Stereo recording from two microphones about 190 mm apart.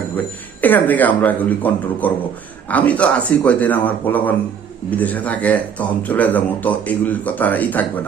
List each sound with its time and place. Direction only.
0.6 s speech: 10° left (ahead or behind)